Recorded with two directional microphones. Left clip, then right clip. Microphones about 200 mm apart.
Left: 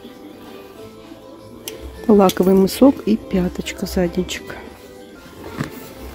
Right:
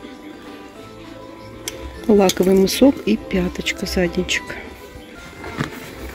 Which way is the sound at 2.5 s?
20° left (ahead or behind).